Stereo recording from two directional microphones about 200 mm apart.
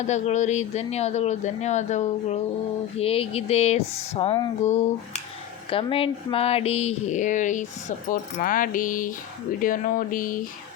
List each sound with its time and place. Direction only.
0.1 s speech: 35° left (ahead or behind)